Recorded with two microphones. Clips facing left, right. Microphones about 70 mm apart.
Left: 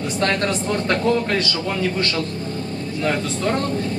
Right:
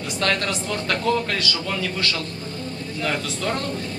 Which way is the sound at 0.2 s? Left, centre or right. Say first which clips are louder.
Left 2 dB; left.